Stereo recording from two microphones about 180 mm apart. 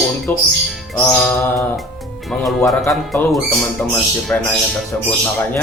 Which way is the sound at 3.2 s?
10° left (ahead or behind).